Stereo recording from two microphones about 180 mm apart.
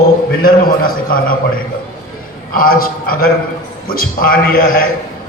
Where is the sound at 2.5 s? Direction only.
50° left (ahead or behind).